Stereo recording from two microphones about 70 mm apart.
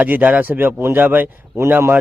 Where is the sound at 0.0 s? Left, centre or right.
Right.